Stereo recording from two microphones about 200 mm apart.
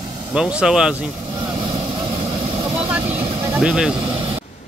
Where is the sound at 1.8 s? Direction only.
30° right (ahead or behind).